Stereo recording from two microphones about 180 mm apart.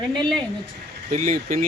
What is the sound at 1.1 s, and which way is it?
Speech, 45° right (ahead or behind).